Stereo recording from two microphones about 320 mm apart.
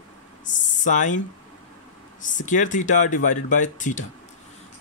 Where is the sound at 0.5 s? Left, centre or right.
Left.